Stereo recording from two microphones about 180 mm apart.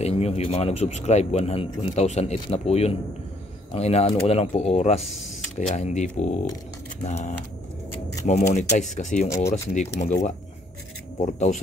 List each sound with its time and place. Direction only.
0.0 s a man's voice: 35° left (ahead or behind)
7.9 s keys jangling: 20° left (ahead or behind)
8.3 s a man's voice: 40° left (ahead or behind)